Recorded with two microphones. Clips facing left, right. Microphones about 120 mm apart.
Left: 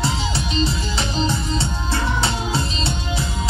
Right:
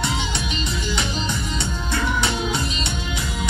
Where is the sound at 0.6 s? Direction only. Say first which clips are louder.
Left 5 dB; 30° left (ahead or behind).